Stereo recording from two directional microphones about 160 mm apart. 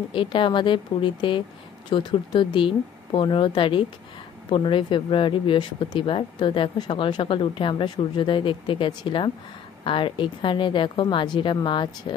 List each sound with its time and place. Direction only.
0.1 s speech: 30° left (ahead or behind)